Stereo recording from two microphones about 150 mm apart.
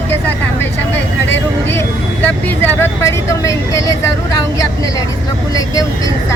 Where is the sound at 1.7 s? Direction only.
15° left (ahead or behind).